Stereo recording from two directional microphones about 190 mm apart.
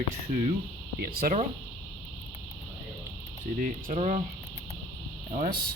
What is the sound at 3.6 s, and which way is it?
Speech, 45° right (ahead or behind).